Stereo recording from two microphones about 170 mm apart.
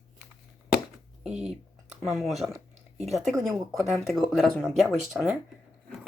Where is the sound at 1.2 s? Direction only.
5° right (ahead or behind).